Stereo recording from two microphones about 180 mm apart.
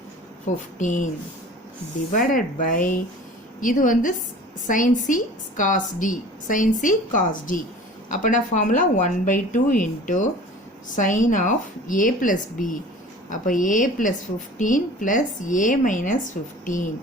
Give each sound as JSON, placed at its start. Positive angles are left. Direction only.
{"t": 0.8, "sound": "a woman's voice", "side_deg": 45}
{"t": 2.1, "sound": "a woman's voice", "side_deg": 50}